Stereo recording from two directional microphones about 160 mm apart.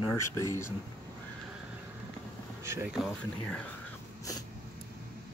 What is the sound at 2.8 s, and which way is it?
Speech, 5° right (ahead or behind).